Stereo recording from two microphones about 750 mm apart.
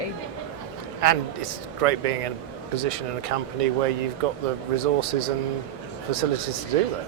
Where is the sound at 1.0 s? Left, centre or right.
Right.